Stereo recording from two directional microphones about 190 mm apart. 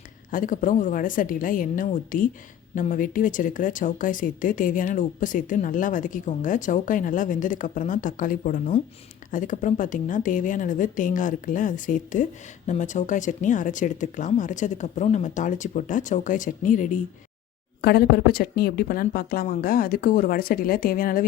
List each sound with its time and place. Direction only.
0.3 s speech: 45° left (ahead or behind)
17.8 s speech: 55° left (ahead or behind)